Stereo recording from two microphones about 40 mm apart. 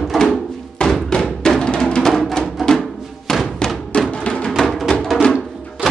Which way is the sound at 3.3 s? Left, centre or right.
Centre.